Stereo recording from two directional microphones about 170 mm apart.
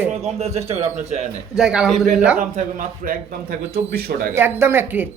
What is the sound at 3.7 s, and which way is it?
Speech, 65° right (ahead or behind).